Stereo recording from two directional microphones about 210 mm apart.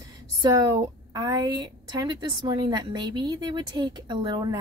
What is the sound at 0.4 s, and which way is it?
A woman's voice, 20° right (ahead or behind).